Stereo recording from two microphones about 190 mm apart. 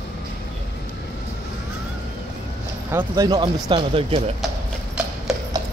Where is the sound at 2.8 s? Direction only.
15° right (ahead or behind).